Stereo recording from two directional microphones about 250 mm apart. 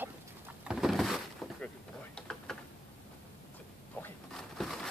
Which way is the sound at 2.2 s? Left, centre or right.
Centre.